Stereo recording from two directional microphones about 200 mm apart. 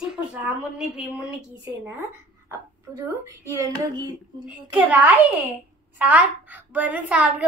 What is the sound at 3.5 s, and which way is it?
Speech, 20° right (ahead or behind).